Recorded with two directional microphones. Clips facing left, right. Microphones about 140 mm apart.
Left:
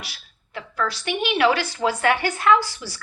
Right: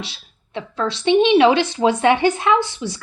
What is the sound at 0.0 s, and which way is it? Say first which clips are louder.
A woman's voice: right 7 dB; 25° right (ahead or behind).